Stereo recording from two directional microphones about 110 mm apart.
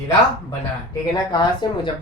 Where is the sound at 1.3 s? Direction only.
40° left (ahead or behind).